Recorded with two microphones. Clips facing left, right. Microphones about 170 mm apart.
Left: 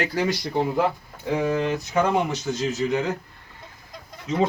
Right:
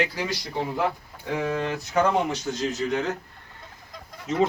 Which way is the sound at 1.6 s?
20° left (ahead or behind).